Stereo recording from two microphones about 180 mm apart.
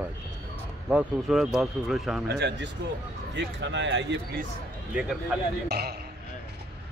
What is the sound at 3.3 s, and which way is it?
Speech, 85° right.